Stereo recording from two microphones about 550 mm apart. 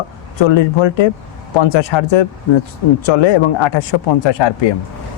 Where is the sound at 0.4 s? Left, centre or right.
Left.